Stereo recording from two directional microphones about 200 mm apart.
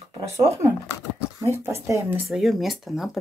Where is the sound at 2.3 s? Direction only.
Centre (ahead or behind).